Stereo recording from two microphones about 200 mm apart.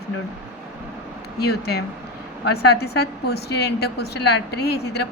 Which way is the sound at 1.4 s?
55° left (ahead or behind).